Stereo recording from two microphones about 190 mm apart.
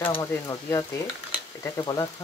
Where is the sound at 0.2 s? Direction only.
15° left (ahead or behind).